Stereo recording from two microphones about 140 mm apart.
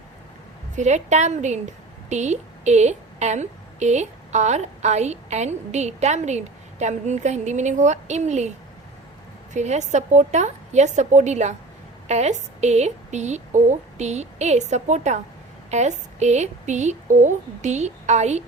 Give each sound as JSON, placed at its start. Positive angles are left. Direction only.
{"t": 0.8, "sound": "a woman's voice", "side_deg": -55}